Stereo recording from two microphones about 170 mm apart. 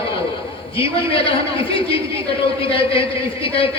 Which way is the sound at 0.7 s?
35° left (ahead or behind).